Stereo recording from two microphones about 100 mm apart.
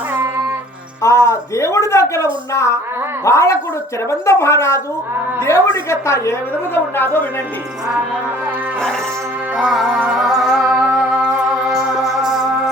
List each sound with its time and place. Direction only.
1.0 s a woman's voice: 30° left (ahead or behind)
9.6 s music: 5° right (ahead or behind)